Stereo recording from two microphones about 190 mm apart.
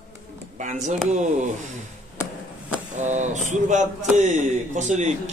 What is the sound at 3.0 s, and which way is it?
Speech, 40° right (ahead or behind).